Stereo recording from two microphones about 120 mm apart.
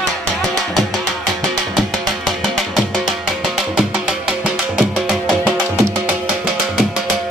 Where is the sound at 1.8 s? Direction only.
Centre (ahead or behind).